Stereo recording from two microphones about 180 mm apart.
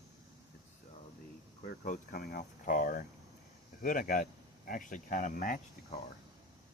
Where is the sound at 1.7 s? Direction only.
50° left (ahead or behind).